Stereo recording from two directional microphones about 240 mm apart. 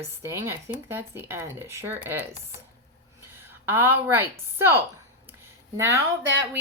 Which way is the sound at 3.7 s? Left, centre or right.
Centre.